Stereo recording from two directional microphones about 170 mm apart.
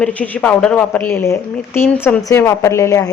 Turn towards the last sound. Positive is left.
turn(degrees=20)  # may be behind; listen again after turning